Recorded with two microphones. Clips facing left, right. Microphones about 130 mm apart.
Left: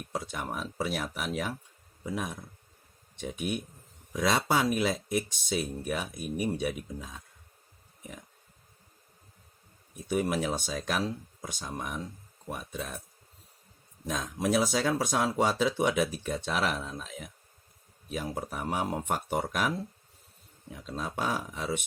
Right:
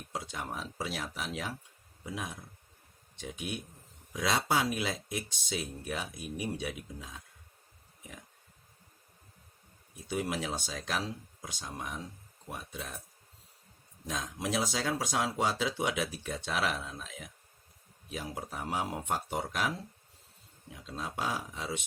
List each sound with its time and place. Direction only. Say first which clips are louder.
0.1 s speech: left 3 dB; 55° left (ahead or behind)
10.1 s speech: left 5 dB; 50° left (ahead or behind)
12.5 s speech: left 5 dB; 50° left (ahead or behind)
14.1 s speech: left 6 dB; 50° left (ahead or behind)
18.1 s speech: left 5 dB; 50° left (ahead or behind)
20.8 s speech: left 3 dB; 50° left (ahead or behind)